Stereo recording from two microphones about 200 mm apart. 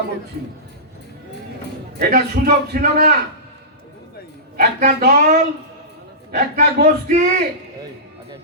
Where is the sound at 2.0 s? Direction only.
50° right (ahead or behind).